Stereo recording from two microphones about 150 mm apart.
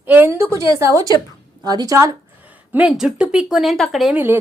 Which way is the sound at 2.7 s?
5° right (ahead or behind).